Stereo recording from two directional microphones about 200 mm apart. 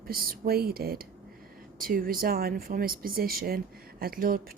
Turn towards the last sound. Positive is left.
turn(degrees=-45)  # may be behind; listen again after turning